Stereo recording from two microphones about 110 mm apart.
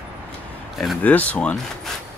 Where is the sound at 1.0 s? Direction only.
15° left (ahead or behind).